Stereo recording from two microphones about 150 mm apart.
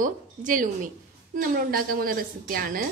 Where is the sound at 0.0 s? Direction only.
60° right (ahead or behind).